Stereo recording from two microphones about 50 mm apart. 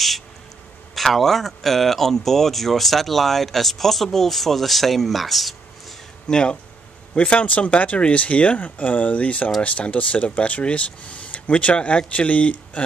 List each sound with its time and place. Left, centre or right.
0.9 s speech: centre
6.2 s speech: centre
7.2 s speech: left